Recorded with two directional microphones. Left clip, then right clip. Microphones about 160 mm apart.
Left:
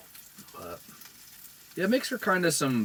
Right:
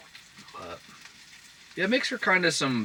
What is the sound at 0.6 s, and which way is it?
Frying, 30° left (ahead or behind).